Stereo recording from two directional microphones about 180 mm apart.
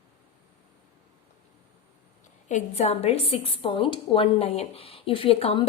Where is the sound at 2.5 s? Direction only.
35° left (ahead or behind).